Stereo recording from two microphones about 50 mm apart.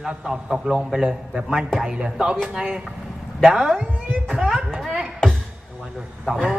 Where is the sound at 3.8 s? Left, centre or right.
Right.